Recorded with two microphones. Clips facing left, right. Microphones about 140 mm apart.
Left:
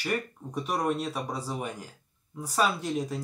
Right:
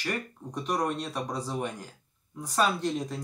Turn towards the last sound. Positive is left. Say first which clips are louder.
# even
turn(degrees=5)  # may be behind; listen again after turning